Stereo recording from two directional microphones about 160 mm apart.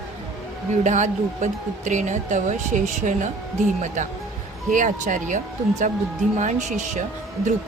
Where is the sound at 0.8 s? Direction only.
50° right (ahead or behind).